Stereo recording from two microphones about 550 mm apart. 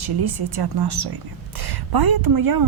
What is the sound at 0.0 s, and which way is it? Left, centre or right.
Speech, right.